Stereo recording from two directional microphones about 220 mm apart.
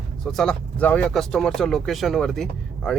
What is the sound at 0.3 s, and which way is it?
Speech, 5° left (ahead or behind).